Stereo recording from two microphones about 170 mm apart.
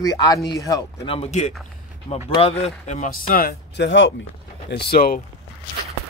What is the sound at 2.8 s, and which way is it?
Speech, 45° left (ahead or behind).